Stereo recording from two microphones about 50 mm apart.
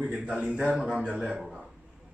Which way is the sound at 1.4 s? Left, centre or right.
Centre.